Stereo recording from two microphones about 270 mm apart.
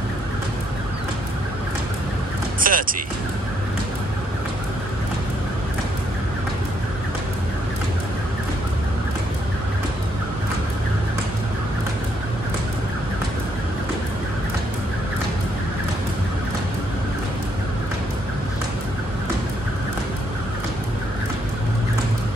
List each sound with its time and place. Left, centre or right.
2.6 s speech: right